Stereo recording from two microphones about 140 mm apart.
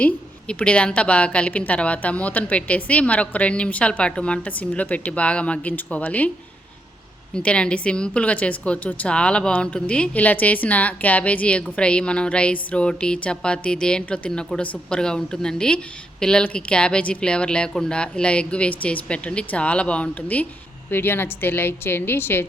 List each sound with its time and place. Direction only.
0.0 s a woman's voice: 10° left (ahead or behind)
7.3 s a woman's voice: 5° left (ahead or behind)